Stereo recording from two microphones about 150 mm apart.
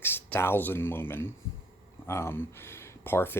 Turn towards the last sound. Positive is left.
turn(degrees=15)  # may be behind; listen again after turning